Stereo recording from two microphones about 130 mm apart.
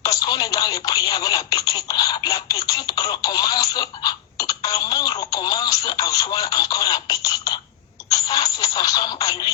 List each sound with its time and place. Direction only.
0.0 s telephone: 30° left (ahead or behind)
2.5 s speech: 30° left (ahead or behind)
4.7 s a sound: 30° left (ahead or behind)
5.3 s radio: 30° left (ahead or behind)
6.3 s a sound: 30° left (ahead or behind)
8.3 s telephone: 30° left (ahead or behind)